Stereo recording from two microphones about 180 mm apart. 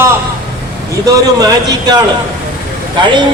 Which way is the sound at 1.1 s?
20° right (ahead or behind).